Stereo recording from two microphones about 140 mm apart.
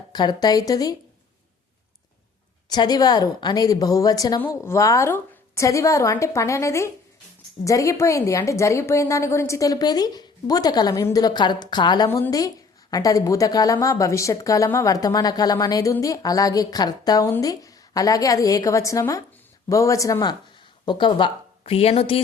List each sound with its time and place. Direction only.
0.1 s a woman's voice: 30° left (ahead or behind)
2.6 s a woman's voice: 30° left (ahead or behind)
4.4 s a woman's voice: 15° left (ahead or behind)
20.8 s speech: 35° left (ahead or behind)
21.6 s a woman's voice: 45° left (ahead or behind)